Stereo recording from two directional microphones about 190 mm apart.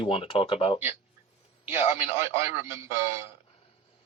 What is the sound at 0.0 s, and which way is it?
Speech, 30° left (ahead or behind).